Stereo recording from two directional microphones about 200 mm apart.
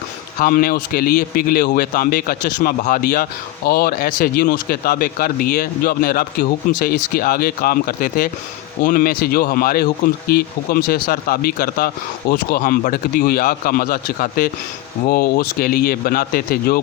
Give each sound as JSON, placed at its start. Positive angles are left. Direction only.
{"t": 0.3, "sound": "speech", "side_deg": 45}